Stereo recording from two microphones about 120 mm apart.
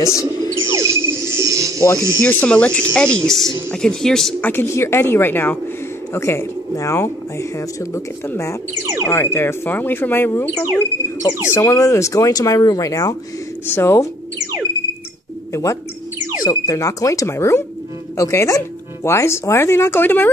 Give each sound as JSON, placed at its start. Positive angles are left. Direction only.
{"t": 0.0, "sound": "a sound", "side_deg": 25}
{"t": 0.6, "sound": "music", "side_deg": -25}
{"t": 2.2, "sound": "speech", "side_deg": 10}
{"t": 4.4, "sound": "speech", "side_deg": 20}
{"t": 15.5, "sound": "speech", "side_deg": 25}